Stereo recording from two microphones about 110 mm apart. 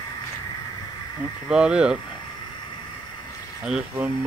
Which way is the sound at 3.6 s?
5° right (ahead or behind).